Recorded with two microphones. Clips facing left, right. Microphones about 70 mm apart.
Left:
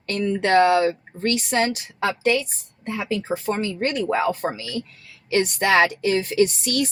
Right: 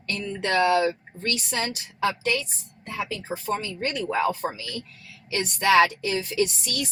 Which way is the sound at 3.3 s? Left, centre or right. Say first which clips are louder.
Left 1 dB; left.